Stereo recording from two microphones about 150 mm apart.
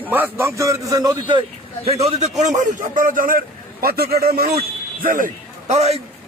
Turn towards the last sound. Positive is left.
turn(degrees=-45)  # may be behind; listen again after turning